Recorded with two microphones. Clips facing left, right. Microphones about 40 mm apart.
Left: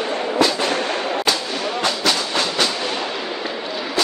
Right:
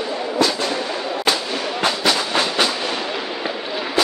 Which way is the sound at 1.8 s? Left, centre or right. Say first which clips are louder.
Right 3 dB; centre.